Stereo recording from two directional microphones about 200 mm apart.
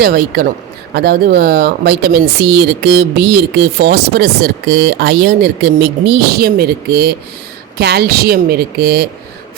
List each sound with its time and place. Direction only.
0.0 s speech: 50° right (ahead or behind)